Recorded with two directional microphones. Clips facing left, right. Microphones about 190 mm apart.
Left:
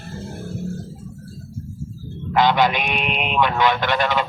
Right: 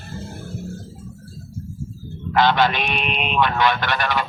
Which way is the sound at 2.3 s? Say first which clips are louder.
Left 1 dB; 15° left (ahead or behind).